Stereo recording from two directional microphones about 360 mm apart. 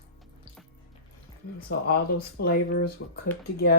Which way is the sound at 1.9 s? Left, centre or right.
Left.